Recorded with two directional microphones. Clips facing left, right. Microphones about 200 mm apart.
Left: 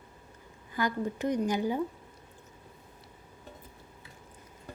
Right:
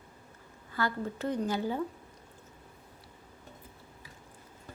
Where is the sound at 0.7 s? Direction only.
15° left (ahead or behind).